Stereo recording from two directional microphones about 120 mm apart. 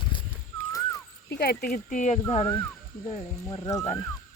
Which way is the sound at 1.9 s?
85° left.